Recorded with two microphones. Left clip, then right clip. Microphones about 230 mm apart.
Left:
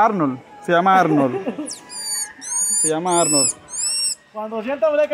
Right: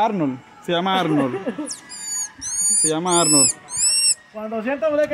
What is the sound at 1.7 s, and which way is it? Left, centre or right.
Owl, centre.